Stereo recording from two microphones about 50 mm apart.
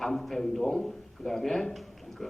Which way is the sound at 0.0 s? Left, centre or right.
Centre.